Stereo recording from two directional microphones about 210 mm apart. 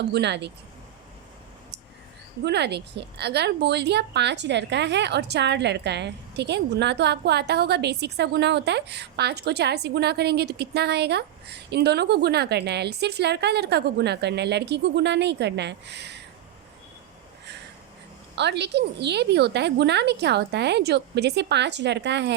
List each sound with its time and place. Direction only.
0.0 s speech: 55° right (ahead or behind)
2.4 s a woman's voice: 55° right (ahead or behind)
18.3 s a woman's voice: 55° right (ahead or behind)